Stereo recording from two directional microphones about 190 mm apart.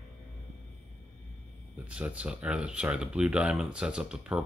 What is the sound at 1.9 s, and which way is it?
Speech, 5° right (ahead or behind).